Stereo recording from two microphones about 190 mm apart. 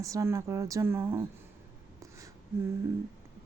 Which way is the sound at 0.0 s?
15° right (ahead or behind).